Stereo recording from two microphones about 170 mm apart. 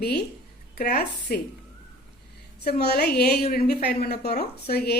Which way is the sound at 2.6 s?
70° left (ahead or behind).